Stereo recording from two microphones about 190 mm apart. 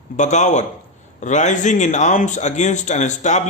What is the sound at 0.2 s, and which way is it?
Speech, 40° left (ahead or behind).